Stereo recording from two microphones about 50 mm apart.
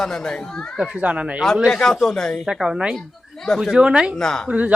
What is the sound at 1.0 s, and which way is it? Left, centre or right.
Speech, right.